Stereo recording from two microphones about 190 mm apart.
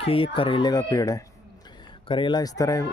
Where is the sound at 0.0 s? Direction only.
30° left (ahead or behind).